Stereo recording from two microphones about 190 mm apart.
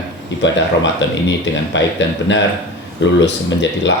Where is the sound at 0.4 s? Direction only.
70° left (ahead or behind).